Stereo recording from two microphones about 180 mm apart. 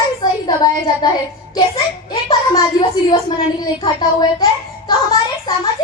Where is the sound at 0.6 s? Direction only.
25° left (ahead or behind).